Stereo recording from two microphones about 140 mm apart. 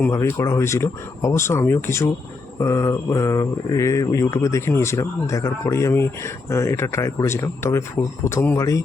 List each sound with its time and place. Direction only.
0.1 s speech: 20° left (ahead or behind)